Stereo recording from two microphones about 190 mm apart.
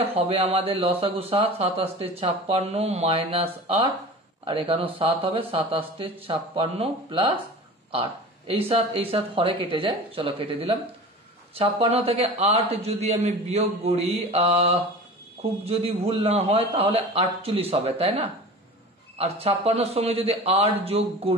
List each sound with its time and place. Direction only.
0.1 s speech: 30° right (ahead or behind)